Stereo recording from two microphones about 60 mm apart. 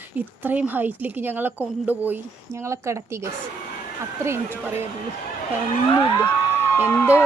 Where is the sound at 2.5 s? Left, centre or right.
Right.